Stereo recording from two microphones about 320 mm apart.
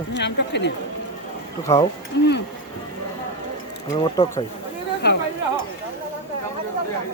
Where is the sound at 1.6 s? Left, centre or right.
Centre.